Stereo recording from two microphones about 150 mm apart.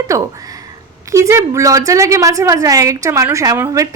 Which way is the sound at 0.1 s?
20° right (ahead or behind).